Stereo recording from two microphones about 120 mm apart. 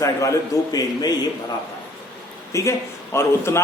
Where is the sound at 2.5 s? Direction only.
25° left (ahead or behind).